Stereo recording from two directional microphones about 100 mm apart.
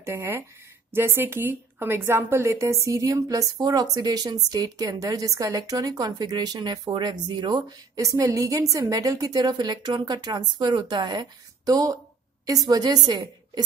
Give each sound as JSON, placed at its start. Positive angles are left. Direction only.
{"t": 0.0, "sound": "a woman's voice", "side_deg": -25}